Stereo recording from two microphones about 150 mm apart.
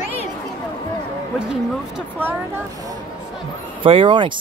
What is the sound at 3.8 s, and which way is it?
Speech, 35° right (ahead or behind).